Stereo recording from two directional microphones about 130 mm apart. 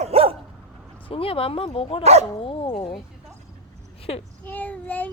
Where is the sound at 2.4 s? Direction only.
45° left (ahead or behind).